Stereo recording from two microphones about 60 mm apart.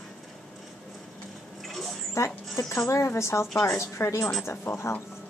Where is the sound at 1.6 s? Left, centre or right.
Centre.